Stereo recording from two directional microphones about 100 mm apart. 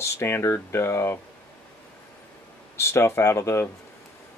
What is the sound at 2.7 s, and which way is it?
Speech, 25° left (ahead or behind).